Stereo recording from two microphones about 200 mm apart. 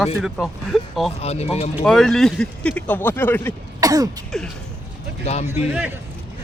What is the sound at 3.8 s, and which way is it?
Throat clearing, 20° right (ahead or behind).